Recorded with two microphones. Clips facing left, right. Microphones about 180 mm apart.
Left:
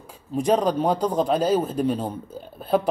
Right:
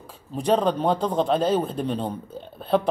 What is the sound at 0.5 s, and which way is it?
A man's voice, 5° left (ahead or behind).